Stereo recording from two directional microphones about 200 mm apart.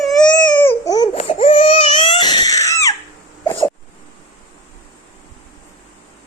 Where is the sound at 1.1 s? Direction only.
35° left (ahead or behind); by 2.9 s 15° left (ahead or behind).